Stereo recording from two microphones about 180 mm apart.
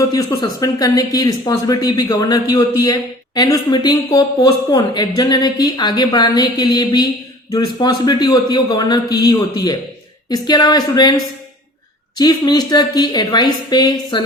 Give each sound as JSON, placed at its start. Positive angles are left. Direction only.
{"t": 0.1, "sound": "speech", "side_deg": 20}